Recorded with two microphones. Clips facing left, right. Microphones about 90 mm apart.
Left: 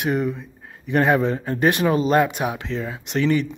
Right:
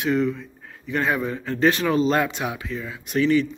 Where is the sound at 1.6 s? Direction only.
20° left (ahead or behind).